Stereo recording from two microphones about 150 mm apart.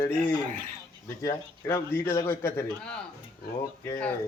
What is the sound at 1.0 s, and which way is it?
Speech, 20° left (ahead or behind).